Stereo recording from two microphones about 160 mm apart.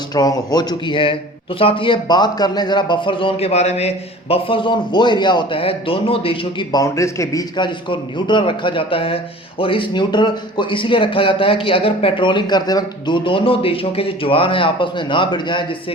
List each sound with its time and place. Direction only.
0.1 s a man's voice: 25° left (ahead or behind)